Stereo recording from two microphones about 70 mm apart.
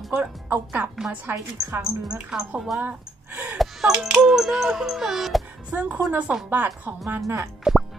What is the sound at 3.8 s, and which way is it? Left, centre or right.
Speech, centre.